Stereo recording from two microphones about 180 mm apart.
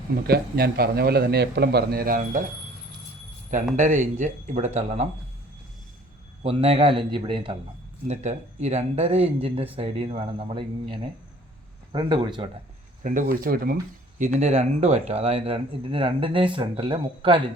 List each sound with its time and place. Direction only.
0.3 s a man's voice: 60° right (ahead or behind)
3.8 s speech: 45° right (ahead or behind)
6.4 s speech: 30° right (ahead or behind)
8.0 s speech: 40° right (ahead or behind)
13.0 s speech: 45° right (ahead or behind)
14.3 s speech: 35° right (ahead or behind)